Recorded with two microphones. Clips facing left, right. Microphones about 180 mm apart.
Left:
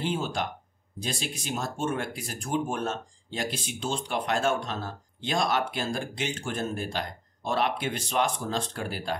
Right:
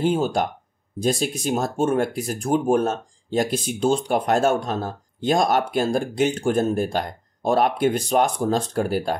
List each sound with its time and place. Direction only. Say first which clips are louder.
0.0 s speech: right 9 dB; 45° right (ahead or behind)